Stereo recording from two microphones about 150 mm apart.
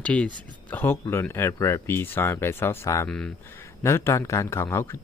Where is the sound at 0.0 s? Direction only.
10° left (ahead or behind).